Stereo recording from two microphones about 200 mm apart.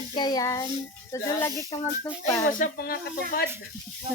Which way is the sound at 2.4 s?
40° left (ahead or behind).